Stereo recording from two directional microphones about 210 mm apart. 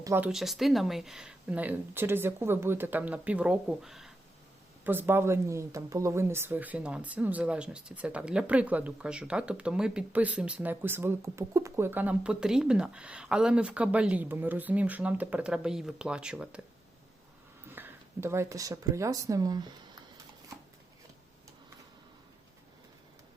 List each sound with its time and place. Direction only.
0.0 s speech: 10° right (ahead or behind)
17.7 s speech: 10° right (ahead or behind)